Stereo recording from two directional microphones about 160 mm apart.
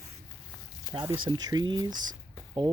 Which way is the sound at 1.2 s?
25° right (ahead or behind).